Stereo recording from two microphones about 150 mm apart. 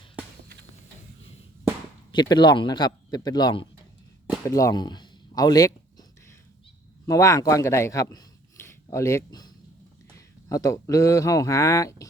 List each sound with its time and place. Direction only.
2.1 s a man's voice: 30° left (ahead or behind)
4.4 s a sound: 20° left (ahead or behind)
7.1 s speech: 20° left (ahead or behind)